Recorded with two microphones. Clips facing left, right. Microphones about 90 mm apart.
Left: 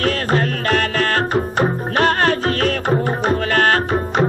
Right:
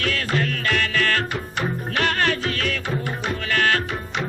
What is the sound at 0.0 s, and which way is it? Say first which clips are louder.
Music: left 6 dB; 40° left (ahead or behind).